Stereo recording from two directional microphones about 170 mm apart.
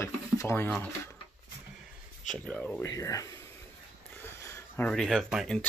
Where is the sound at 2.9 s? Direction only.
20° left (ahead or behind).